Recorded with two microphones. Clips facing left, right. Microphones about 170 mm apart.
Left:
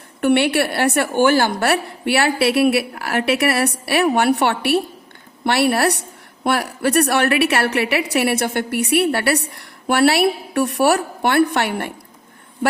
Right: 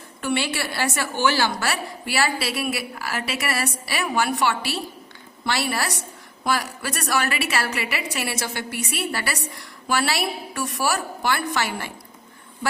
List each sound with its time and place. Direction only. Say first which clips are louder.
0.2 s a woman's voice: left 9 dB; 60° left (ahead or behind)